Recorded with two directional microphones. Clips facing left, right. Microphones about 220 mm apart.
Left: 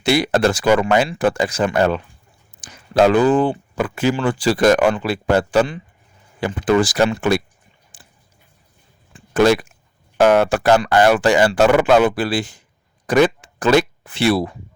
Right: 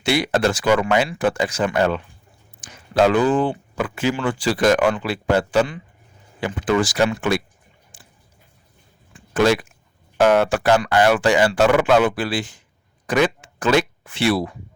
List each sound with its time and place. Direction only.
0.0 s speech: 40° left (ahead or behind)
7.9 s squish: 35° left (ahead or behind)
9.1 s a sound: 40° left (ahead or behind)
10.2 s speech: 45° left (ahead or behind)